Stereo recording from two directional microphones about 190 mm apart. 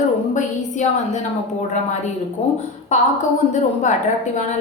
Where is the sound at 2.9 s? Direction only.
40° left (ahead or behind).